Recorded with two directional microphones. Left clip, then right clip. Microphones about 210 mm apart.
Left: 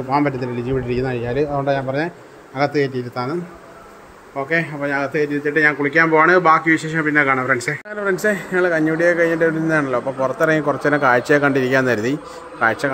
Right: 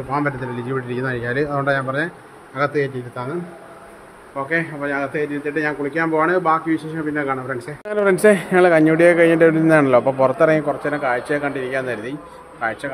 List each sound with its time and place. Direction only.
0.1 s a man's voice: 10° left (ahead or behind)
4.4 s a man's voice: 15° left (ahead or behind)
7.9 s speech: 20° right (ahead or behind)
10.7 s a man's voice: 20° left (ahead or behind)